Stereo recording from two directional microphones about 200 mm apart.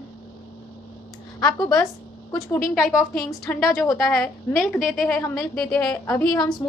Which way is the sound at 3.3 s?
10° left (ahead or behind).